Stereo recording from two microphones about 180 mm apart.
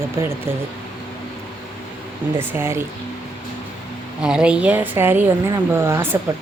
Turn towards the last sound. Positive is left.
turn(degrees=-15)  # may be behind; listen again after turning